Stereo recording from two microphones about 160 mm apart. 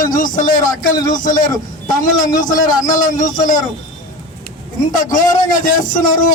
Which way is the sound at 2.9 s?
55° left (ahead or behind).